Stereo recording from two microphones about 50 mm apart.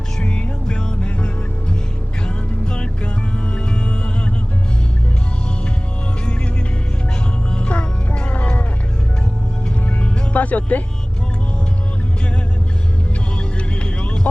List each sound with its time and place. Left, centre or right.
0.2 s music: centre
7.5 s music: left
10.0 s music: left
13.8 s vehicle: centre